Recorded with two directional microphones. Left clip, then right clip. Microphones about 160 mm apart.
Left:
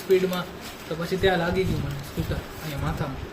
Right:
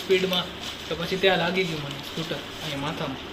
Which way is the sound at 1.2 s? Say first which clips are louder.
Right 1 dB; 40° left (ahead or behind).